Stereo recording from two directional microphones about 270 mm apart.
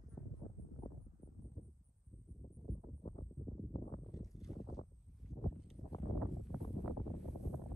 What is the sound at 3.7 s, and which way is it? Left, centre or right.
Clip-clop, left.